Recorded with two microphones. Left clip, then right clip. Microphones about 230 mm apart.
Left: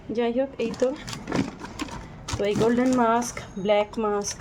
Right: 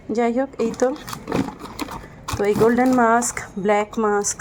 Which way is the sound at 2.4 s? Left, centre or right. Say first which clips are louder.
Right 6 dB; centre.